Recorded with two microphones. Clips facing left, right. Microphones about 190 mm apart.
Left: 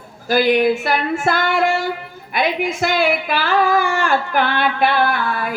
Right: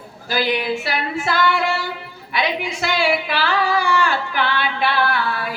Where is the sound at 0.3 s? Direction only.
50° left (ahead or behind).